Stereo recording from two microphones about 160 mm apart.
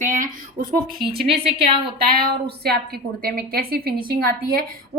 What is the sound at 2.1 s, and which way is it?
A woman's voice, 75° right (ahead or behind).